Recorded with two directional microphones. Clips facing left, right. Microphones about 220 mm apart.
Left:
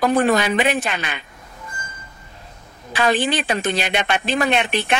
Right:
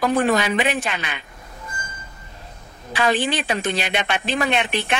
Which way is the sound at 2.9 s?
45° left (ahead or behind).